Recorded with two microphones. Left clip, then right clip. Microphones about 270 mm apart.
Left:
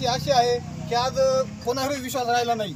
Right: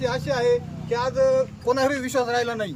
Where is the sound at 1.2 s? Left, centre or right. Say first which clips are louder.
Right 2 dB; centre.